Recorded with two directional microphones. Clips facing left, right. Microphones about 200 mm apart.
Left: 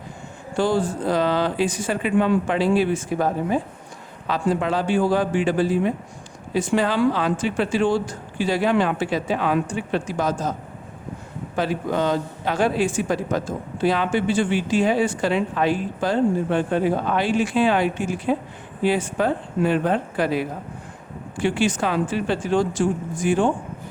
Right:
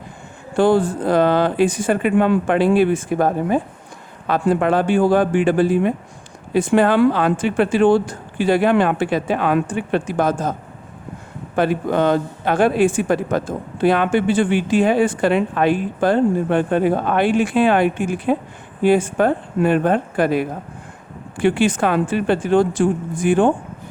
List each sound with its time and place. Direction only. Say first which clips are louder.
0.5 s a man's voice: right 6 dB; 55° right (ahead or behind)
11.5 s a man's voice: right 5 dB; 55° right (ahead or behind)